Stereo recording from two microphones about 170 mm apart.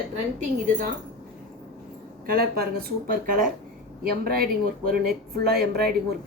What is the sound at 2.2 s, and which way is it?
A woman's voice, 60° right (ahead or behind).